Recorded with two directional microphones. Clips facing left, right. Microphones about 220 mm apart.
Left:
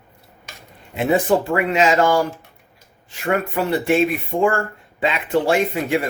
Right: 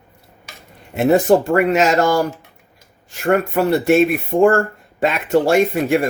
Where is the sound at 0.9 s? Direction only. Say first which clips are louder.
Right 4 dB; 45° right (ahead or behind).